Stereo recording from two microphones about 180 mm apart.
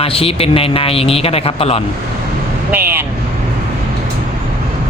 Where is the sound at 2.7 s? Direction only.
10° right (ahead or behind).